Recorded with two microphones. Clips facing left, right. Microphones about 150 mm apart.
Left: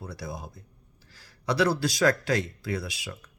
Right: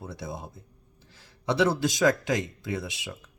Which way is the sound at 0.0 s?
20° right (ahead or behind).